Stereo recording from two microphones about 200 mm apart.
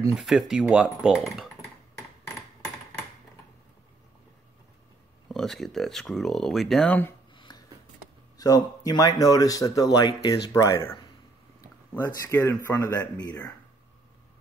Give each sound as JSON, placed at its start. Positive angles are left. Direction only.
{"t": 0.1, "sound": "speech", "side_deg": 0}
{"t": 5.3, "sound": "speech", "side_deg": 0}
{"t": 7.3, "sound": "a sound", "side_deg": 20}
{"t": 8.4, "sound": "speech", "side_deg": 20}
{"t": 12.3, "sound": "speech", "side_deg": 10}